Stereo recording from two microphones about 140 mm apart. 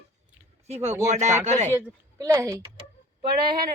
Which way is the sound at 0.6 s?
50° right (ahead or behind).